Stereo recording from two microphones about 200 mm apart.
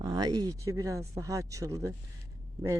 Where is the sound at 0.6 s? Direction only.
15° right (ahead or behind).